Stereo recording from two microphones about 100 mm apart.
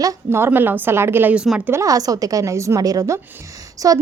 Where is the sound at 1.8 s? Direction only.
35° right (ahead or behind).